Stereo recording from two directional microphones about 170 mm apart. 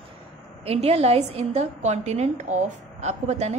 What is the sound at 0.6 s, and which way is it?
A woman's voice, 35° right (ahead or behind).